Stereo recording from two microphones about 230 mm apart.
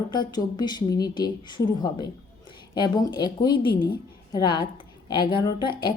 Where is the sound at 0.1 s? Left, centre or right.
Centre.